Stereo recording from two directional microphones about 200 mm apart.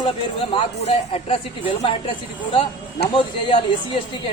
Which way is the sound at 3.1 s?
25° left (ahead or behind).